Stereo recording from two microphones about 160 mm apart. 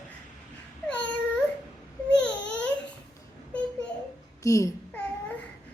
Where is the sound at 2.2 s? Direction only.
5° left (ahead or behind).